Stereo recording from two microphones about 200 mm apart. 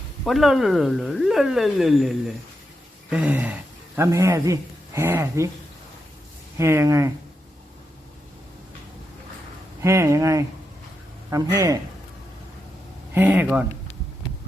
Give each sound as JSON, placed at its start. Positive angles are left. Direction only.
{"t": 0.3, "sound": "speech", "side_deg": 0}
{"t": 6.6, "sound": "speech", "side_deg": -15}
{"t": 9.8, "sound": "speech", "side_deg": -15}
{"t": 11.5, "sound": "speech", "side_deg": -15}
{"t": 13.1, "sound": "speech", "side_deg": -10}